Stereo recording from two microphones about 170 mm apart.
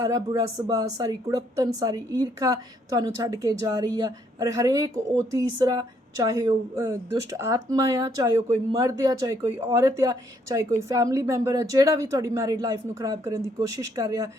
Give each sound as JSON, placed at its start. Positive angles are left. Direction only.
{"t": 0.0, "sound": "speech", "side_deg": -20}